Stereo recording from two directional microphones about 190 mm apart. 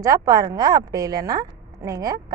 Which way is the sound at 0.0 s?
15° right (ahead or behind).